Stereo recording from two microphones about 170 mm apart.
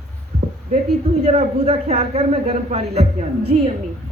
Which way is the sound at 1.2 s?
40° right (ahead or behind).